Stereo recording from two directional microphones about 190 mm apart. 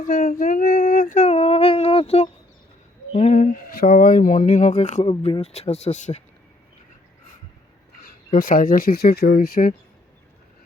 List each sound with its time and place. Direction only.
0.0 s female singing: 45° left (ahead or behind)
3.1 s speech: 35° left (ahead or behind)
8.0 s speech: 50° left (ahead or behind)